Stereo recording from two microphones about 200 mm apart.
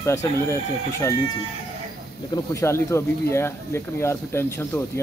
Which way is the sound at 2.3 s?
15° left (ahead or behind).